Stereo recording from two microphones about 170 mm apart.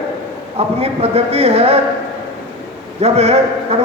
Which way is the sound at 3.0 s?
40° right (ahead or behind).